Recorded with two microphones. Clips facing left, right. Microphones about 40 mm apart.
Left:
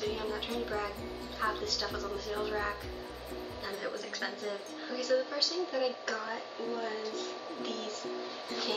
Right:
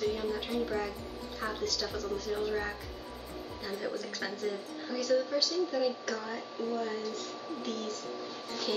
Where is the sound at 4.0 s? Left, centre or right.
Centre.